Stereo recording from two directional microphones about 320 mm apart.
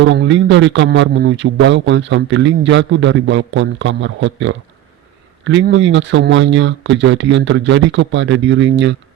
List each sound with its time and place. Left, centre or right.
0.0 s a man's voice: right